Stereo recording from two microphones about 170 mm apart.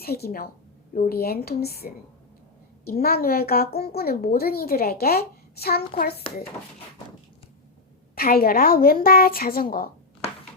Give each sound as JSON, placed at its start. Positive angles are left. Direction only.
{"t": 0.0, "sound": "a woman's voice", "side_deg": 65}
{"t": 6.3, "sound": "speech", "side_deg": 35}
{"t": 8.1, "sound": "a woman's voice", "side_deg": 60}